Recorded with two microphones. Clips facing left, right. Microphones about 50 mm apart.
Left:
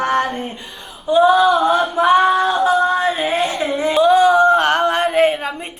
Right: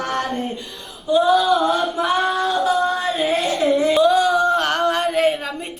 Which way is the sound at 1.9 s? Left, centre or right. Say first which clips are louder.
Left 7 dB; left.